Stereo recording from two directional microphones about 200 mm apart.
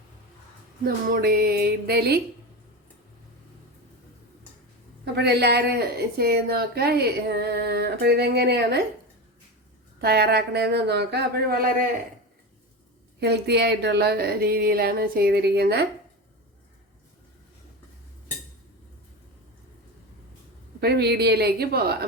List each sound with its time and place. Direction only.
0.9 s speech: 50° right (ahead or behind)
5.1 s speech: 55° right (ahead or behind)
10.0 s speech: 55° right (ahead or behind)
13.1 s speech: 55° right (ahead or behind)
20.8 s speech: 55° right (ahead or behind)